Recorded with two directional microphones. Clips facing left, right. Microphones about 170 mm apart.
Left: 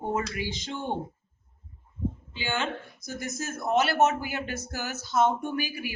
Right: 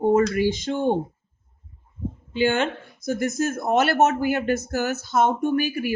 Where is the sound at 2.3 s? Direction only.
55° right (ahead or behind).